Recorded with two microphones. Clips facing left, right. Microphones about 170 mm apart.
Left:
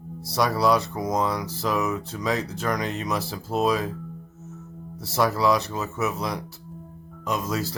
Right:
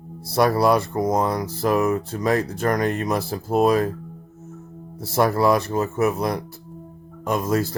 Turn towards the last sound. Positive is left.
turn(degrees=-50)  # may be behind; listen again after turning